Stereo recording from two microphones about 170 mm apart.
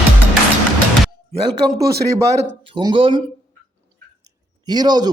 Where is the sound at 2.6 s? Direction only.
30° right (ahead or behind).